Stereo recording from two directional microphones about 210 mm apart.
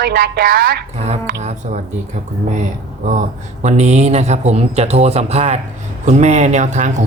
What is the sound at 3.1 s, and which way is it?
Speech, 35° right (ahead or behind).